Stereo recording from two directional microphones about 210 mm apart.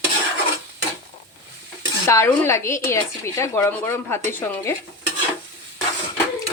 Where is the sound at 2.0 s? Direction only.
10° left (ahead or behind).